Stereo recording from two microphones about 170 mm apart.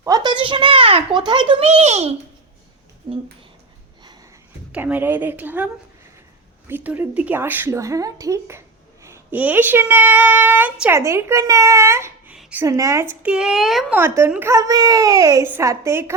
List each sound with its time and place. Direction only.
0.0 s a sound: 25° right (ahead or behind); by 2.1 s 40° right (ahead or behind)
3.1 s a child's voice: 20° right (ahead or behind)
4.7 s speech: 10° right (ahead or behind)
12.4 s a sound: 5° right (ahead or behind)
12.6 s speech: 20° right (ahead or behind); by 14.0 s centre (ahead or behind)
14.0 s a child's voice: 15° right (ahead or behind)